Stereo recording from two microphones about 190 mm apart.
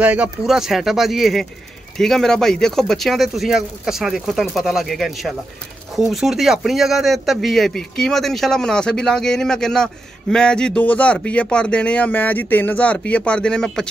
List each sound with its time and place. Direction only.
0.0 s speech: 5° right (ahead or behind)